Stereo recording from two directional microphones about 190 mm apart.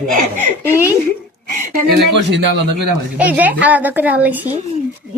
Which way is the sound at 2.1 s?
65° right (ahead or behind).